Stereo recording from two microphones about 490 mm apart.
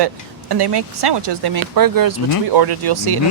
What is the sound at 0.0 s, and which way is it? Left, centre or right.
A woman's voice, right.